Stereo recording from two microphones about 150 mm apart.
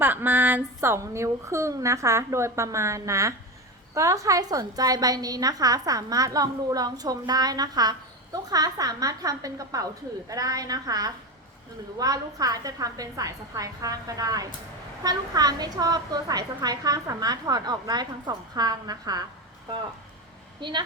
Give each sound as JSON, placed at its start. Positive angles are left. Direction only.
{"t": 0.0, "sound": "a woman's voice", "side_deg": -15}
{"t": 20.6, "sound": "a woman's voice", "side_deg": -30}